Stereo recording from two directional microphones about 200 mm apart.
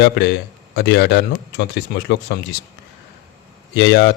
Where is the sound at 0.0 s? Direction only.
55° left (ahead or behind).